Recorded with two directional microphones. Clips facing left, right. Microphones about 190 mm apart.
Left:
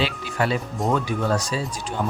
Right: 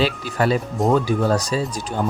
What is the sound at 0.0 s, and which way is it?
Speech, 40° right (ahead or behind).